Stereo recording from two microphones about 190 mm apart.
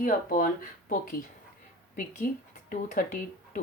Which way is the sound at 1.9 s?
45° left (ahead or behind).